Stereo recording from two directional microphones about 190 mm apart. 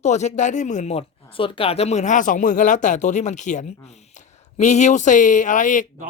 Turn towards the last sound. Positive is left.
turn(degrees=40)  # may be behind; listen again after turning